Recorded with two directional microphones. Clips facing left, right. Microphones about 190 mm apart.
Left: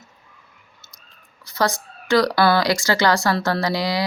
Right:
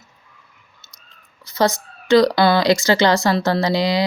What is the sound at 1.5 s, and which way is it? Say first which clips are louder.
Speech: right 4 dB; 20° right (ahead or behind).